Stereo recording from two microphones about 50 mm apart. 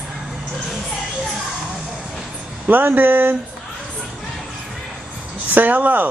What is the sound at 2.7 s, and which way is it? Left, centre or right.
Speech, right.